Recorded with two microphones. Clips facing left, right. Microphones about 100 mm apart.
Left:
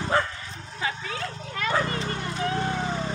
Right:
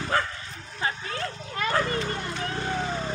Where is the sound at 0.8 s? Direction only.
40° right (ahead or behind).